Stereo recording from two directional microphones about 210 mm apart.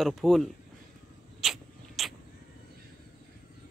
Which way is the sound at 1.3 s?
Centre (ahead or behind).